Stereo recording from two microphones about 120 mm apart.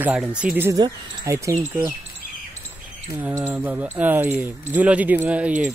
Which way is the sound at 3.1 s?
15° right (ahead or behind).